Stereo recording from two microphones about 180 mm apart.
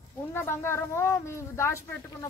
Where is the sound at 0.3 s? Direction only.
15° left (ahead or behind).